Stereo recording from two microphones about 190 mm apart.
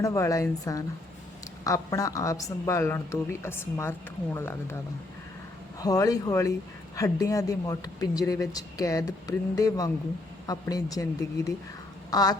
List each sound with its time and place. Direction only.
0.0 s a woman's voice: 15° left (ahead or behind)
5.8 s speech: 20° left (ahead or behind)